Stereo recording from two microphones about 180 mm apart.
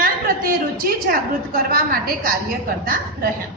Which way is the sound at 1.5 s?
55° right (ahead or behind).